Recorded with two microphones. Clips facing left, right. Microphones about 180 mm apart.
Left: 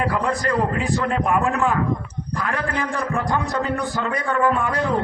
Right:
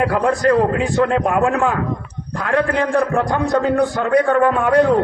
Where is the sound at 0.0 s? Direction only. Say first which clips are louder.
Right 6 dB; 65° right (ahead or behind).